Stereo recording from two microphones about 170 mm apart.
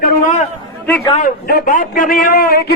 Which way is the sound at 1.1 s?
55° left (ahead or behind).